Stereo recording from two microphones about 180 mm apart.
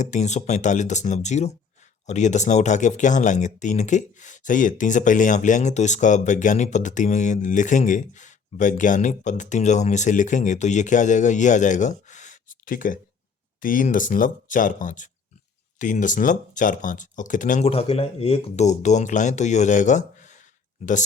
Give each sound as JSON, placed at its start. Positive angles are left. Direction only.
{"t": 0.0, "sound": "speech", "side_deg": 40}